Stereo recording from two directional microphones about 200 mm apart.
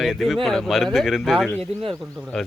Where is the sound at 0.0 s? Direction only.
Centre (ahead or behind).